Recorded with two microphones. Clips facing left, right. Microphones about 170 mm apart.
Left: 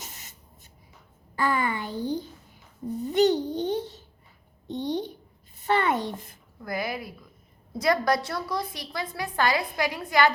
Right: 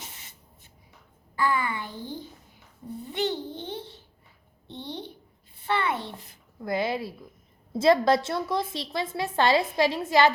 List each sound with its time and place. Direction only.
0.0 s spray: 40° left (ahead or behind)
1.4 s a child's voice: 45° left (ahead or behind)
6.6 s a woman's voice: 25° right (ahead or behind)